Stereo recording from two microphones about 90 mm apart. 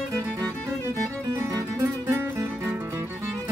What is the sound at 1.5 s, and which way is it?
Music, 35° right (ahead or behind).